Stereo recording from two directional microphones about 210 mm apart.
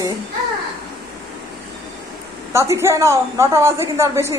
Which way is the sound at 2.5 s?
15° right (ahead or behind).